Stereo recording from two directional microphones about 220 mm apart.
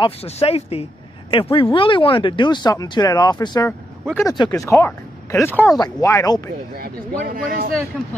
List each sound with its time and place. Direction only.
0.0 s speech: 25° left (ahead or behind)
6.8 s speech: 45° right (ahead or behind)